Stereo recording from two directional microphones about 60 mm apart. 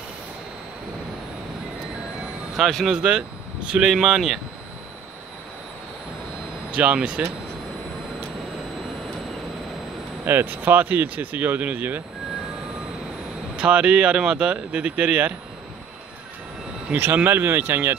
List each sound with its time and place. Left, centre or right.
2.5 s speech: centre
3.0 s speech: centre
6.8 s speech: centre
10.2 s speech: right
13.6 s speech: centre
16.9 s speech: right